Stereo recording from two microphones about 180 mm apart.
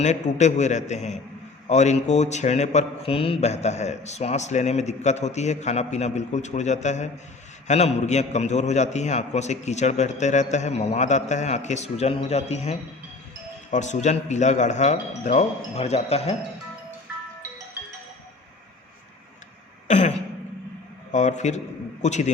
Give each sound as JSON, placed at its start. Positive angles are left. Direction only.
{"t": 0.0, "sound": "speech", "side_deg": 40}
{"t": 19.9, "sound": "throat clearing", "side_deg": 40}
{"t": 21.1, "sound": "speech", "side_deg": 40}